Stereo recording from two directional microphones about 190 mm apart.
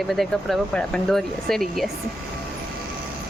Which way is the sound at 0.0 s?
Centre (ahead or behind).